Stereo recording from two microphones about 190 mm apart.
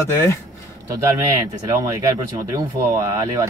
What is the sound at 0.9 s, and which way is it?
Speech, 15° right (ahead or behind).